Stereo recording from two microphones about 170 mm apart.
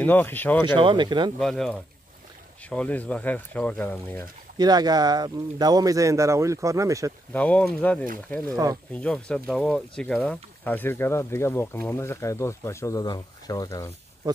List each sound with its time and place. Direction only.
0.0 s speech: 10° left (ahead or behind)
0.7 s speech: 30° right (ahead or behind)
1.4 s speech: 5° left (ahead or behind)
4.6 s speech: 25° right (ahead or behind)
7.3 s speech: 5° left (ahead or behind)
8.5 s speech: 20° right (ahead or behind)
8.9 s speech: 5° left (ahead or behind)